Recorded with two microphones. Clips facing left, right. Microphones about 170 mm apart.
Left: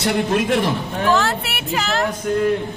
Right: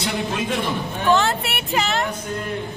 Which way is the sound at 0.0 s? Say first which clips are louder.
Left 6 dB; 75° left (ahead or behind).